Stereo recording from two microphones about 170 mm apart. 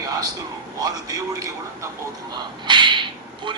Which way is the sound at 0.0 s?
20° right (ahead or behind).